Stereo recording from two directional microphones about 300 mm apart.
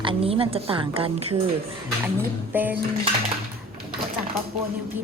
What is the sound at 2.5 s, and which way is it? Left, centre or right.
Speech, centre.